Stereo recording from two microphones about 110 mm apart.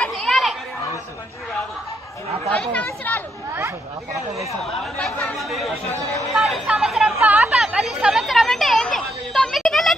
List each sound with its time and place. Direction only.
0.0 s children playing: 5° left (ahead or behind)
2.5 s chatter: 15° left (ahead or behind)
3.5 s chatter: 25° right (ahead or behind)
4.7 s chatter: 5° left (ahead or behind)